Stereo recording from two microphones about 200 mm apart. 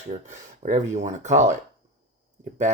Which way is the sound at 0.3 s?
40° right (ahead or behind).